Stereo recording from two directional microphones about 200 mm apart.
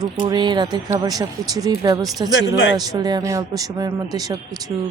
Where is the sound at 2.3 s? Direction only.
70° left (ahead or behind).